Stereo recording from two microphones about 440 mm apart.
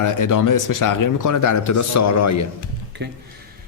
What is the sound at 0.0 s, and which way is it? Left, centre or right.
Speech, left.